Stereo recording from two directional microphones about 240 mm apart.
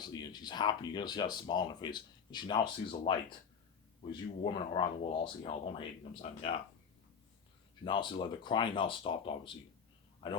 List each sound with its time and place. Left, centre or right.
0.0 s speech: centre
4.0 s speech: left
7.9 s speech: left